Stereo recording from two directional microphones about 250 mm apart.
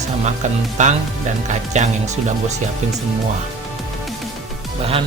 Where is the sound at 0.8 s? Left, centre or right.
Right.